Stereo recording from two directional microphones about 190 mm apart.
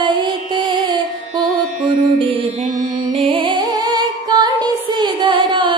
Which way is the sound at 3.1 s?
30° right (ahead or behind).